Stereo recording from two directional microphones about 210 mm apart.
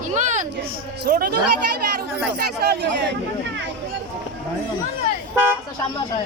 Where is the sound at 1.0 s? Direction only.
45° right (ahead or behind).